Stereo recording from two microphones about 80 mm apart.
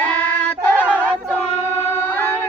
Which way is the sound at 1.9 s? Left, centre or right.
Left.